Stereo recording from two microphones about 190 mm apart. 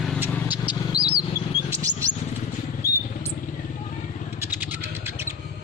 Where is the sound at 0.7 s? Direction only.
20° left (ahead or behind).